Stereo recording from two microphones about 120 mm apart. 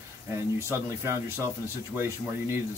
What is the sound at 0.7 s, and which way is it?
Speech, 20° right (ahead or behind).